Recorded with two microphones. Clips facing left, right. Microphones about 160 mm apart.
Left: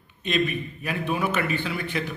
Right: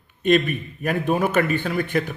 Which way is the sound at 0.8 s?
45° right (ahead or behind).